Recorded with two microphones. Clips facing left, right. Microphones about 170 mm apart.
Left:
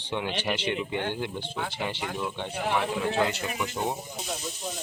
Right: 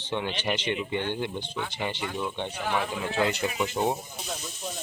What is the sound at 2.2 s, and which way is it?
Speech, 5° left (ahead or behind).